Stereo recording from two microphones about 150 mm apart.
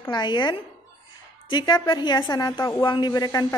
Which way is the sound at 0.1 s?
30° left (ahead or behind).